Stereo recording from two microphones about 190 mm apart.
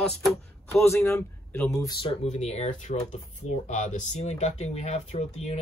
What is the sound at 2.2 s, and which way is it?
Speech, 35° left (ahead or behind).